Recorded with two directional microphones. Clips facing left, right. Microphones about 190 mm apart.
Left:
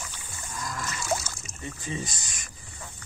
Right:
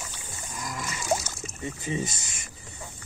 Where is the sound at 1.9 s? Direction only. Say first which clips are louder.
Right 4 dB; 20° right (ahead or behind).